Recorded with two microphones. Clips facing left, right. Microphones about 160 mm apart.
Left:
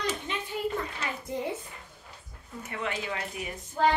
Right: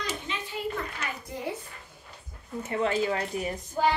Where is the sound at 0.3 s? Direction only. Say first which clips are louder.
Left 1 dB; 50° left (ahead or behind).